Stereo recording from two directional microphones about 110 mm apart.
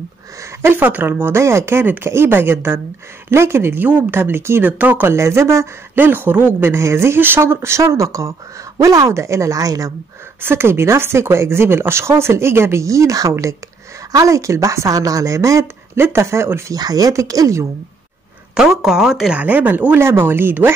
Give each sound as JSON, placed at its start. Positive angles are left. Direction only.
{"t": 0.6, "sound": "speech", "side_deg": -20}
{"t": 16.7, "sound": "speech", "side_deg": -35}
{"t": 18.5, "sound": "speech", "side_deg": -5}
{"t": 19.4, "sound": "speech", "side_deg": -15}